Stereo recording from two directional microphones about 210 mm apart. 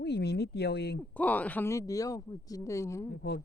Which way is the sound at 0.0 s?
50° left (ahead or behind).